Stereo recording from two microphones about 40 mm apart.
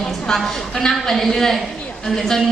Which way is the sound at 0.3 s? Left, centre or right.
Centre.